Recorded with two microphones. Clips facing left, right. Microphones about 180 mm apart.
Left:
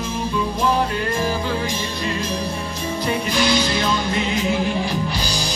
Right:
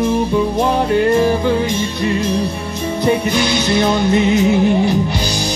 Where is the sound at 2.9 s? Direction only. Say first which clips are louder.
Right 6 dB; 20° right (ahead or behind).